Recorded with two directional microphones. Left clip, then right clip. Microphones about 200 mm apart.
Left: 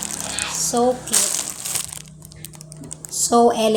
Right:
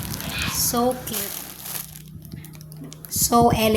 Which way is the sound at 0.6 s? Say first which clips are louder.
Left 4 dB; 20° right (ahead or behind).